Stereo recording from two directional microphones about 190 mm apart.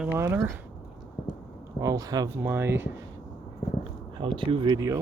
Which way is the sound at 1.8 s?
20° right (ahead or behind).